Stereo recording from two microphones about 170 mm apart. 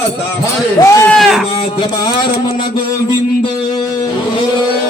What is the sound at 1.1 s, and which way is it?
Speech, centre (ahead or behind).